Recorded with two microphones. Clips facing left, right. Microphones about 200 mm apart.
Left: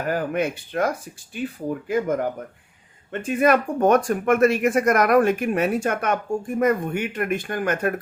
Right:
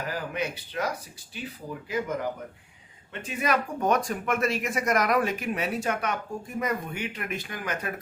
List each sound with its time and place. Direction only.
0.0 s speech: 50° left (ahead or behind)